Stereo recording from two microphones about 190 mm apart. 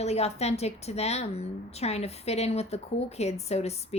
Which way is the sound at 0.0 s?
35° left (ahead or behind).